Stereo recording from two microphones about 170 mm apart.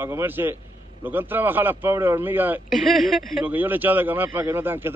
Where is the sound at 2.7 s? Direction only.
Centre (ahead or behind).